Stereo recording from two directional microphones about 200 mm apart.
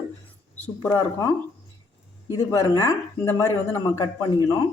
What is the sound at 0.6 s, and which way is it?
Speech, 10° left (ahead or behind).